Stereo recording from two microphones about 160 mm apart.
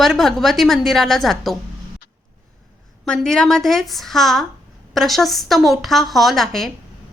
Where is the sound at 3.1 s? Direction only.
5° left (ahead or behind).